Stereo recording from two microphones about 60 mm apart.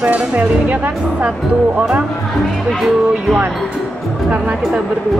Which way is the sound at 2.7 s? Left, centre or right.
Centre.